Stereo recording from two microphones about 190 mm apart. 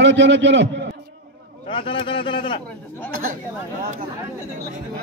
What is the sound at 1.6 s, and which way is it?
Speech, 25° left (ahead or behind).